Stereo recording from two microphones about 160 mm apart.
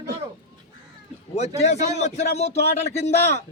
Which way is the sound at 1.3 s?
45° left (ahead or behind).